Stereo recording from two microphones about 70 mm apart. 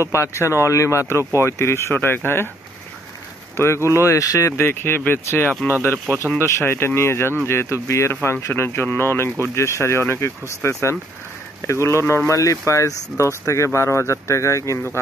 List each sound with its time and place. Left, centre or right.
0.0 s speech: left
3.5 s speech: left
4.6 s speech: left